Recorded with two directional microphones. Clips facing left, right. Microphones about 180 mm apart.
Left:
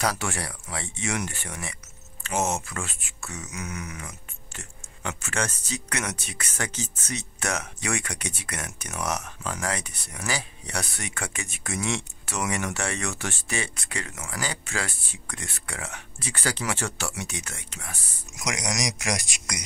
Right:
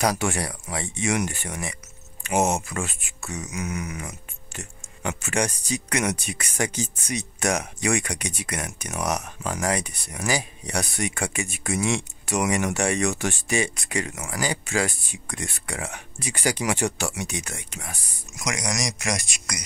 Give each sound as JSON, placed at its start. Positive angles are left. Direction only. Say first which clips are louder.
{"t": 0.0, "sound": "speech", "louder": "right 4 dB", "side_deg": -15}
{"t": 18.6, "sound": "speech", "louder": "right 1 dB", "side_deg": 15}